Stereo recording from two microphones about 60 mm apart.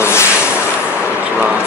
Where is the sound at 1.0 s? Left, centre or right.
Right.